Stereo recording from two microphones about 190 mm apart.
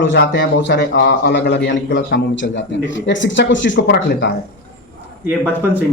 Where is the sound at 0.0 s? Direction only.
75° left (ahead or behind).